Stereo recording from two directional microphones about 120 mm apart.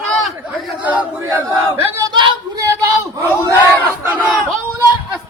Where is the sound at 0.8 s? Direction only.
10° right (ahead or behind).